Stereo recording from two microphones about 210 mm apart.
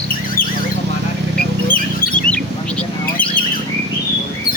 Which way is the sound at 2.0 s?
5° left (ahead or behind).